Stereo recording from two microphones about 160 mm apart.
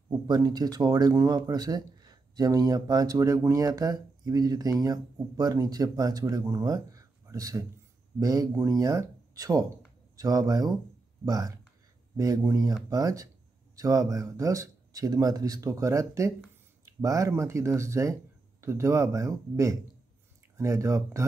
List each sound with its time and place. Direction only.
0.3 s speech: 25° right (ahead or behind)